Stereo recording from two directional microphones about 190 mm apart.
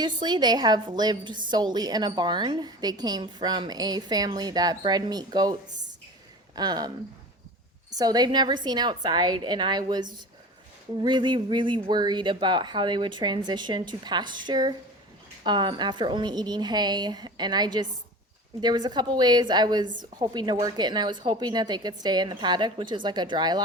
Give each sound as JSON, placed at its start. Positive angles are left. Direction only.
{"t": 0.2, "sound": "a woman's voice", "side_deg": -20}
{"t": 6.6, "sound": "a woman's voice", "side_deg": -20}
{"t": 7.9, "sound": "a woman's voice", "side_deg": -20}